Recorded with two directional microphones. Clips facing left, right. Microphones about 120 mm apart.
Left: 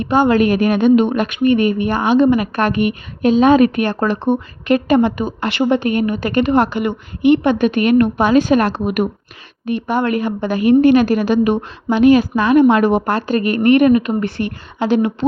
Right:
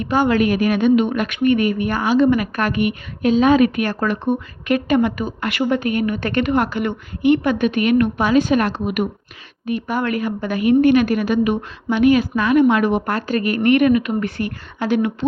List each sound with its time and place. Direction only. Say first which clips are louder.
0.3 s a woman's voice: left 3 dB; 35° left (ahead or behind)
6.7 s a woman's voice: left 3 dB; 20° left (ahead or behind)
7.6 s a woman's voice: left 3 dB; 35° left (ahead or behind)
9.6 s a woman's voice: left 4 dB; 30° left (ahead or behind)